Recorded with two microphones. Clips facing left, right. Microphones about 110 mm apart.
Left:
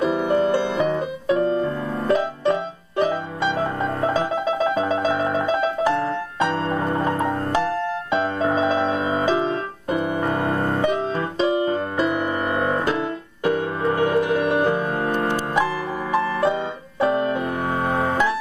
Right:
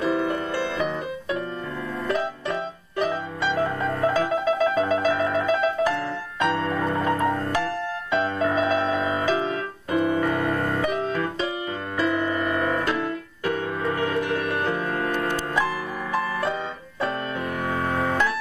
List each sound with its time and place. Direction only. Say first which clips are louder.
0.0 s music: left 5 dB; 25° left (ahead or behind)
1.3 s piano: left 11 dB; 25° left (ahead or behind)
3.0 s music: left 4 dB; 30° left (ahead or behind)
7.1 s music: left 1 dB; 20° left (ahead or behind)
17.0 s piano: left 8 dB; 20° left (ahead or behind)
17.8 s music: left 3 dB; 20° left (ahead or behind)